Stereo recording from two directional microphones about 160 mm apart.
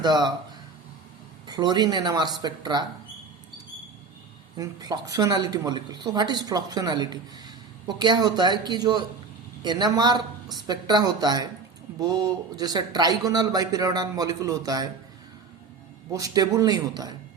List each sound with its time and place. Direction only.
0.0 s speech: 25° right (ahead or behind)
1.5 s speech: 25° right (ahead or behind)
4.5 s speech: 25° right (ahead or behind)
16.1 s speech: 25° right (ahead or behind)